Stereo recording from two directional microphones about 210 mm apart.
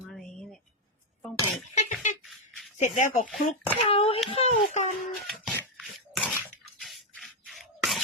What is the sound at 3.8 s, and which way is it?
Speech, 25° left (ahead or behind).